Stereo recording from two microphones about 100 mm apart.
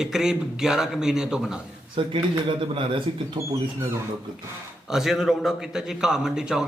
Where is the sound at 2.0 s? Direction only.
60° right (ahead or behind).